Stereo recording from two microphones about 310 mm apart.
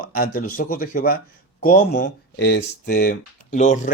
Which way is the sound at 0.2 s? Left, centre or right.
Left.